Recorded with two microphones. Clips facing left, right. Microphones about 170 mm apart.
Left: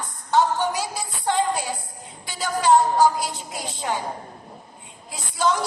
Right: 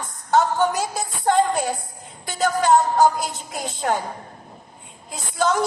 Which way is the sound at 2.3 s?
50° right (ahead or behind).